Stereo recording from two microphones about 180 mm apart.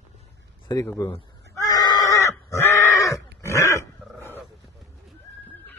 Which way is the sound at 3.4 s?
15° left (ahead or behind).